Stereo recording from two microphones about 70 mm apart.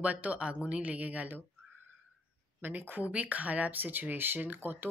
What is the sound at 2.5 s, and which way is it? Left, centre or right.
Speech, right.